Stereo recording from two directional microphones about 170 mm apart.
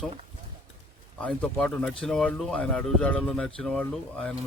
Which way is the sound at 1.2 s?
5° left (ahead or behind).